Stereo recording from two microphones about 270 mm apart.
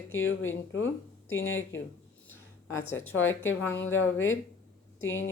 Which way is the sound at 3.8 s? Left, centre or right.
Left.